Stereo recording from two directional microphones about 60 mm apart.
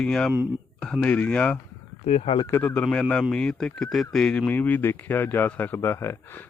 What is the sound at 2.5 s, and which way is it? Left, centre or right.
Speech, left.